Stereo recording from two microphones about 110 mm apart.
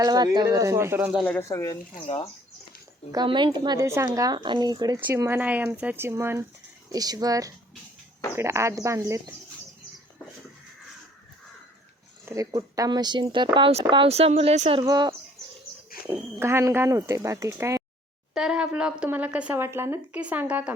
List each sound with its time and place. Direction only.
0.0 s speech: 35° right (ahead or behind); by 1.2 s 15° right (ahead or behind)
1.4 s speech: 25° left (ahead or behind)
1.7 s speech: 45° left (ahead or behind)
3.2 s a woman's voice: 45° right (ahead or behind)
3.8 s speech: 25° right (ahead or behind)
4.9 s speech: 20° right (ahead or behind)
6.9 s speech: 35° right (ahead or behind)
12.2 s a woman's voice: 30° right (ahead or behind); by 13.7 s 45° right (ahead or behind)
14.1 s speech: 70° right (ahead or behind)
14.8 s speech: 35° right (ahead or behind)
16.0 s speech: 25° right (ahead or behind)
18.3 s a woman's voice: 5° right (ahead or behind)
19.5 s a woman's voice: 25° right (ahead or behind)